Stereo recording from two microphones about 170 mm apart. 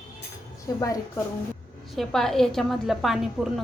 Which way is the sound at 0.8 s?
20° left (ahead or behind).